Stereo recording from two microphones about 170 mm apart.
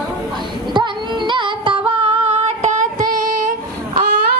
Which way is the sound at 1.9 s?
30° right (ahead or behind).